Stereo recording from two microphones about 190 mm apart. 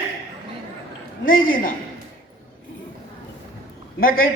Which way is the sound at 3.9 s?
50° left (ahead or behind).